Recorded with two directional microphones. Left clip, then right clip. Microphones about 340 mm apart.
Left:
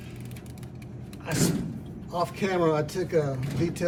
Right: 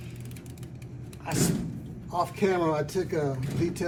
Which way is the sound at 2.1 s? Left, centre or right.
Centre.